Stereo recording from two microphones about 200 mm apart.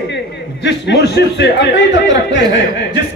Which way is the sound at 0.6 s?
60° left (ahead or behind).